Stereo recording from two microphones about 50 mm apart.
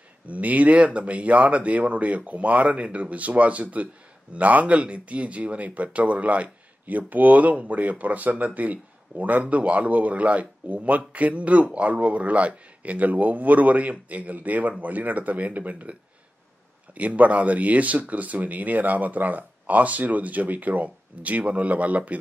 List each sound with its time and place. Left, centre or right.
0.3 s speech: right